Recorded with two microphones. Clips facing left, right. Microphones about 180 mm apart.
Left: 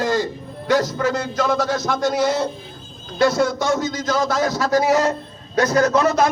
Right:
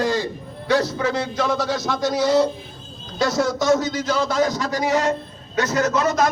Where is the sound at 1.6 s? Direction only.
50° left (ahead or behind).